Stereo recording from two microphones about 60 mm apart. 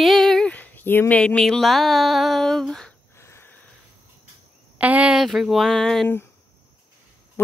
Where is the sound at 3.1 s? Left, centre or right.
Left.